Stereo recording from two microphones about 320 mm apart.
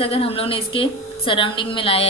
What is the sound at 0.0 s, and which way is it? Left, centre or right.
A woman's voice, centre.